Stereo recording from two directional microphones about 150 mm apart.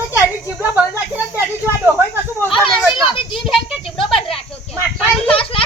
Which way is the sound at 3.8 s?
35° left (ahead or behind).